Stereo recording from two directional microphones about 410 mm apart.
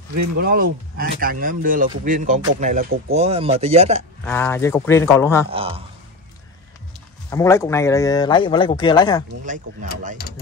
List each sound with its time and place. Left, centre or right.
0.4 s speech: right
4.2 s speech: centre
5.5 s speech: centre
7.2 s speech: centre
9.4 s speech: centre